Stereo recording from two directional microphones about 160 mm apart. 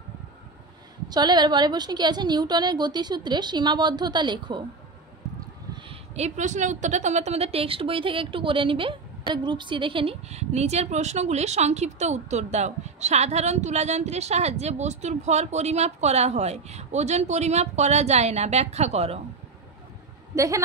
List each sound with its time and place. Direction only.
1.0 s a woman's voice: 25° right (ahead or behind)
6.1 s a woman's voice: 45° right (ahead or behind)
20.3 s a woman's voice: 20° right (ahead or behind)